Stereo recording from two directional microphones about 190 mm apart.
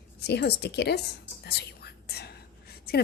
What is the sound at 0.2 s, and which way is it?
Speech, 60° left (ahead or behind).